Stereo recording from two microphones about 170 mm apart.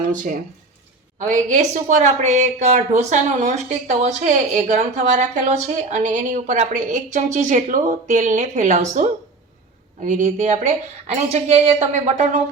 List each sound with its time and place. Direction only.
0.1 s a woman's voice: 50° right (ahead or behind)